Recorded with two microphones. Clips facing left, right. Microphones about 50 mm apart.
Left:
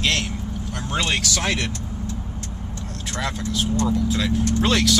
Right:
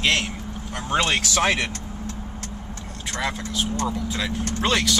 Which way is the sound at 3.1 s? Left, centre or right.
Centre.